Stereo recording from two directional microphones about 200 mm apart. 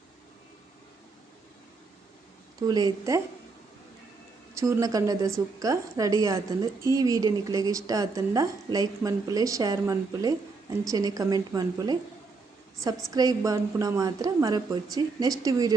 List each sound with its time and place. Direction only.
2.6 s a woman's voice: 20° right (ahead or behind)
4.5 s a woman's voice: 15° right (ahead or behind)
13.1 s a woman's voice: 20° right (ahead or behind)